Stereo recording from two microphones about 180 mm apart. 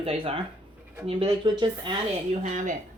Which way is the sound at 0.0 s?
30° right (ahead or behind).